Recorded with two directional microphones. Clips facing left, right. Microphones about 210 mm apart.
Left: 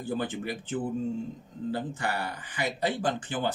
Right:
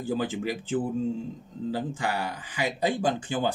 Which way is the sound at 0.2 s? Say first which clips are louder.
Right 3 dB; 90° right.